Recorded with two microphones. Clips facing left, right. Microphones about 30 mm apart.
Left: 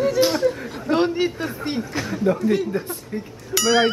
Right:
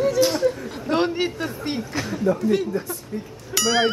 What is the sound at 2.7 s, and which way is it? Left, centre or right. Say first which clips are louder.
Speech: left 1 dB; left.